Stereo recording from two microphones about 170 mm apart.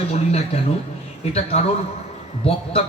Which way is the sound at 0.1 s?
40° left (ahead or behind).